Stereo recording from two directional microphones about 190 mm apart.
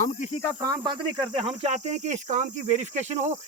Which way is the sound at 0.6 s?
20° right (ahead or behind).